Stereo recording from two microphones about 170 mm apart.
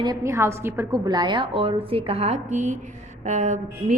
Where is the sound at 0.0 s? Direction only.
20° right (ahead or behind).